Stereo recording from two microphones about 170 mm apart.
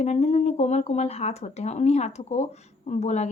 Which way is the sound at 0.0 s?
40° left (ahead or behind).